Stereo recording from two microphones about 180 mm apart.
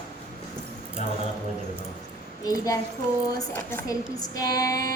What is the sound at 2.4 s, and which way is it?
A woman's voice, 20° left (ahead or behind).